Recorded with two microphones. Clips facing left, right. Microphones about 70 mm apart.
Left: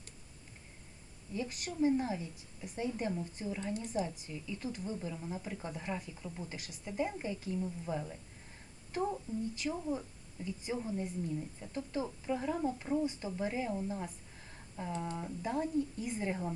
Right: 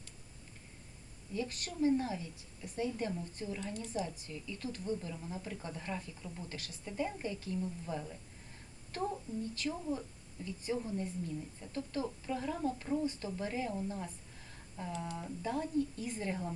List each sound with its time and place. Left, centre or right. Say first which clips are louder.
1.3 s a woman's voice: even; centre